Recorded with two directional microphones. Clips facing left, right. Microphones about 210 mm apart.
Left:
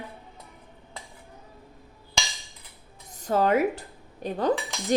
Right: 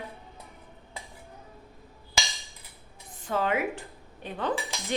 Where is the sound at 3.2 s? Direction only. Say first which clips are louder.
Left 6 dB; 40° left (ahead or behind).